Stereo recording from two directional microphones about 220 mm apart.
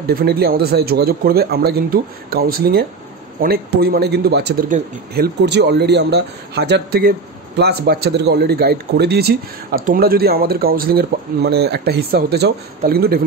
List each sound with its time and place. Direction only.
0.0 s speech: 45° right (ahead or behind)